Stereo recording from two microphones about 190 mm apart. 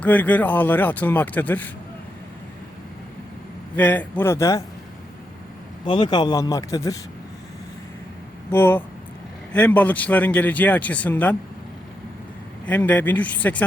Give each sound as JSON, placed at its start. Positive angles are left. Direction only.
{"t": 0.0, "sound": "a man's voice", "side_deg": 10}
{"t": 3.8, "sound": "a man's voice", "side_deg": 10}
{"t": 5.8, "sound": "speech", "side_deg": 25}
{"t": 8.4, "sound": "a man's voice", "side_deg": 10}
{"t": 12.6, "sound": "a man's voice", "side_deg": 10}